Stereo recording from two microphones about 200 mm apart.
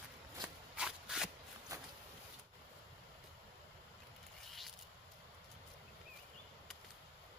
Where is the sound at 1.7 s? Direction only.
15° right (ahead or behind).